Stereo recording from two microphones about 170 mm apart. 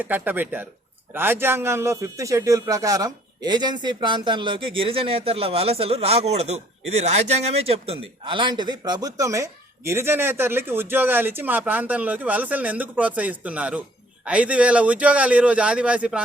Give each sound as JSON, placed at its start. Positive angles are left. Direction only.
{"t": 0.0, "sound": "a man's voice", "side_deg": -10}